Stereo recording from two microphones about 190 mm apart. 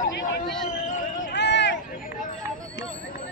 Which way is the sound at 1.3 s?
65° left (ahead or behind).